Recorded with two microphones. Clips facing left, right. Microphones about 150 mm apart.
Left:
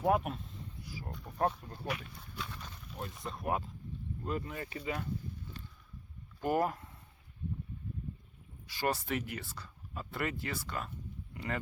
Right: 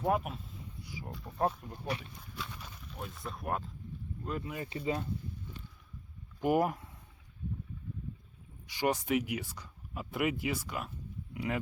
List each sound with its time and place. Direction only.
0.0 s a sound: centre (ahead or behind)
1.5 s speech: 10° right (ahead or behind)
1.9 s speech: 30° right (ahead or behind)
2.1 s speech: centre (ahead or behind)
2.5 s a sound: 10° right (ahead or behind)
2.8 s a sound: centre (ahead or behind)
3.2 s speech: centre (ahead or behind)
4.4 s speech: 15° right (ahead or behind)
4.7 s speech: 25° right (ahead or behind)
6.4 s speech: 15° right (ahead or behind)
8.6 s speech: 15° right (ahead or behind)